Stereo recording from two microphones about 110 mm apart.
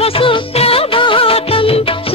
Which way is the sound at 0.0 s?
55° left (ahead or behind).